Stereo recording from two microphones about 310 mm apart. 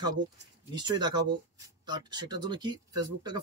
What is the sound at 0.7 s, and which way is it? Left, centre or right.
Speech, centre.